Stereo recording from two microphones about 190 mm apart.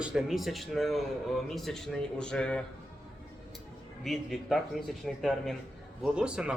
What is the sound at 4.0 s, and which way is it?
Speech, centre (ahead or behind).